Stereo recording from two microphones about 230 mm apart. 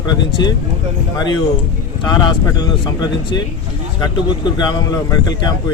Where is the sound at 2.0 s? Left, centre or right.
Centre.